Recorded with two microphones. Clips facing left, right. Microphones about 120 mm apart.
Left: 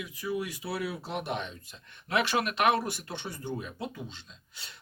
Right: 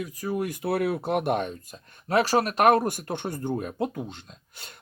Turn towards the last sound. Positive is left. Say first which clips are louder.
# right 4 dB
turn(degrees=-50)  # may be behind; listen again after turning